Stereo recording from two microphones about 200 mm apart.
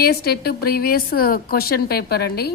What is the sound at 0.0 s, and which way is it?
A woman's voice, 50° left (ahead or behind).